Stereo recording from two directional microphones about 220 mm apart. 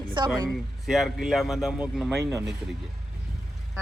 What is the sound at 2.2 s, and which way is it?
Speech, 15° right (ahead or behind).